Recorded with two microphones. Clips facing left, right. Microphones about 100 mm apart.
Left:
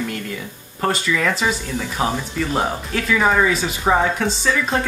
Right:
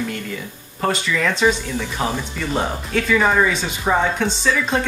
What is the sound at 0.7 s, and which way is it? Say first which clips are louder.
Speech: even; centre (ahead or behind).